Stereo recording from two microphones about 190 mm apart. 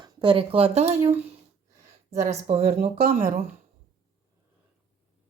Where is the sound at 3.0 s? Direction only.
45° right (ahead or behind).